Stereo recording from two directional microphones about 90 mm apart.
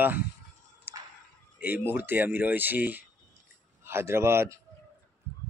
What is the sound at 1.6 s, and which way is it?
Speech, 20° right (ahead or behind).